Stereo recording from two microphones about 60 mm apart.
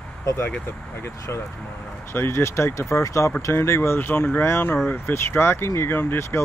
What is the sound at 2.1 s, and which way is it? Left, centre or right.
Speech, left.